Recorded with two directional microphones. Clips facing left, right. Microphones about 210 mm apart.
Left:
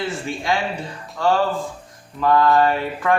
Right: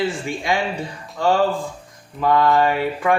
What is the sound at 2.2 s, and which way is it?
Speech, 15° right (ahead or behind).